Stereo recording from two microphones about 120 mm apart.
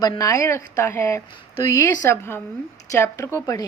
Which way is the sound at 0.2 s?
25° left (ahead or behind).